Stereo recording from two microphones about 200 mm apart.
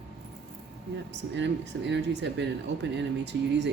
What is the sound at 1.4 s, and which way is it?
Speech, 60° right (ahead or behind).